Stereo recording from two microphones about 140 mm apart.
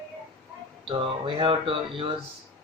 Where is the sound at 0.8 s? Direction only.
40° right (ahead or behind).